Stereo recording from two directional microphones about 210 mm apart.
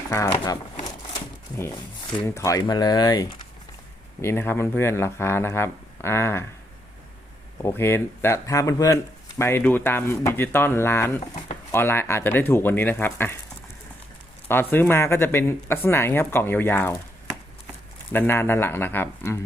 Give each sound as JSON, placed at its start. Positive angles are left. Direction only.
{"t": 0.3, "sound": "speech", "side_deg": 25}
{"t": 0.9, "sound": "a sound", "side_deg": 15}
{"t": 2.2, "sound": "speech", "side_deg": 15}
{"t": 7.6, "sound": "speech", "side_deg": 10}
{"t": 14.4, "sound": "speech", "side_deg": 10}
{"t": 18.1, "sound": "speech", "side_deg": 10}